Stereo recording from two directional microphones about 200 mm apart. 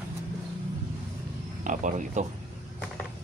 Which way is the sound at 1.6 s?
40° right (ahead or behind).